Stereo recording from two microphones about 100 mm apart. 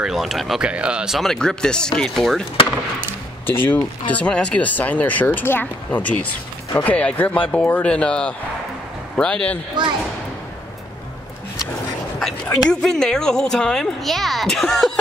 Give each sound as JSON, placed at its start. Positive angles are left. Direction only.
{"t": 0.0, "sound": "speech", "side_deg": 0}
{"t": 3.4, "sound": "speech", "side_deg": 20}
{"t": 12.6, "sound": "speech", "side_deg": 5}